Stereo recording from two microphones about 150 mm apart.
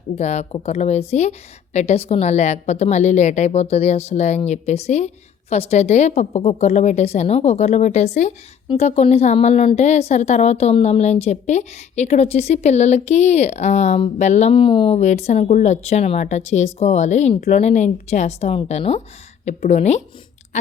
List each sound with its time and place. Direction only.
0.2 s a woman's voice: 45° left (ahead or behind)
14.5 s speech: 35° left (ahead or behind)
14.9 s a woman's voice: 50° left (ahead or behind)